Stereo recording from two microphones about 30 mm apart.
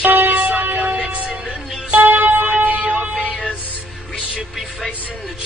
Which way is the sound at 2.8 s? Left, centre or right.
Right.